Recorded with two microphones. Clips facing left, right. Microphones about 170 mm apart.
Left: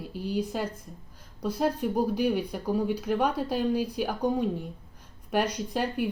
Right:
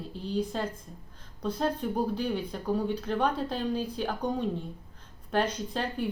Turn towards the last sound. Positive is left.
turn(degrees=10)  # may be behind; listen again after turning